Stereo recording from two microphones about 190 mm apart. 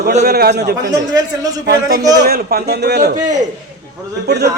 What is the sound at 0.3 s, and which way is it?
Speech, 55° right (ahead or behind).